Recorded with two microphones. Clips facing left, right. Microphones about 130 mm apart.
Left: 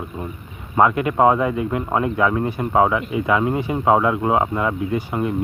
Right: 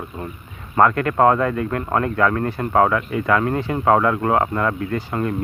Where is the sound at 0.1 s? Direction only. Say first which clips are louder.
Left 1 dB; 10° left (ahead or behind).